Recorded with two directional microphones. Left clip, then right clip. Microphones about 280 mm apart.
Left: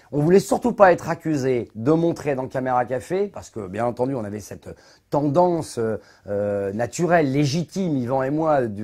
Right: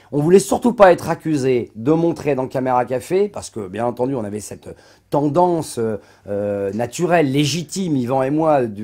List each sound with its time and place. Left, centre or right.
0.1 s speech: centre